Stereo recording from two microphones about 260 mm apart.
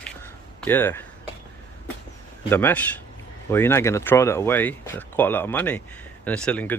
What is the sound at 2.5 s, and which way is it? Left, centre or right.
Speech, centre.